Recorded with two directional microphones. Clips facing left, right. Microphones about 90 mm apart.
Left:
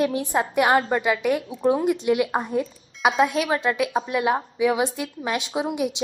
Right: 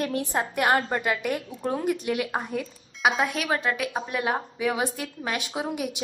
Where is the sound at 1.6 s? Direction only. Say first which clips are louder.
Left 6 dB; 20° left (ahead or behind).